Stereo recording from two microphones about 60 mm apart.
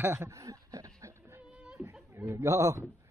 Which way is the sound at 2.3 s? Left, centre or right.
Right.